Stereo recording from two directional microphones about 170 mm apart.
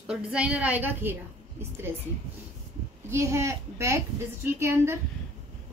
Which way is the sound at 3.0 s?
15° right (ahead or behind).